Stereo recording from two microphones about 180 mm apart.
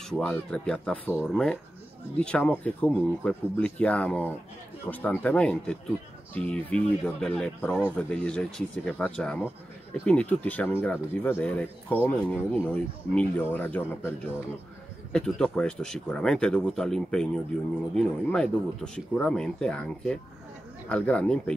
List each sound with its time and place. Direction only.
0.1 s speech: 5° left (ahead or behind)
15.1 s speech: 5° left (ahead or behind)